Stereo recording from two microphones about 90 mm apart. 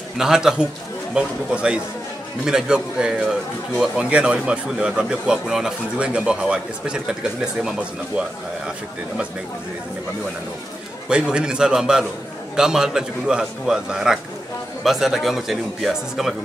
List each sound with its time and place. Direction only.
0.2 s a man's voice: 5° right (ahead or behind)
11.1 s a man's voice: 10° right (ahead or behind)